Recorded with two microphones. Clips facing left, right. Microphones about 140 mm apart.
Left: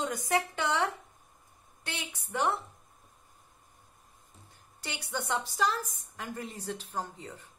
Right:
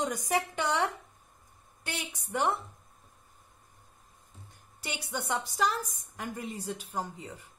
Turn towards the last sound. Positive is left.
turn(degrees=-10)  # may be behind; listen again after turning